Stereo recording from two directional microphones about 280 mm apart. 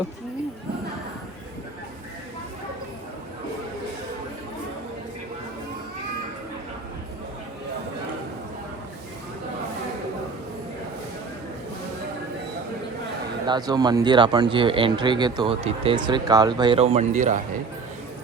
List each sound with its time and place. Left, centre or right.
13.5 s speech: centre